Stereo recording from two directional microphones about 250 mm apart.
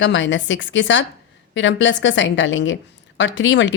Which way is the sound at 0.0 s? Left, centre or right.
Left.